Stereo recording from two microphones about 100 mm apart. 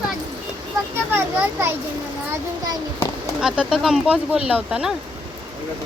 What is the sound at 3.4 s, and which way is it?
Speech, 5° right (ahead or behind).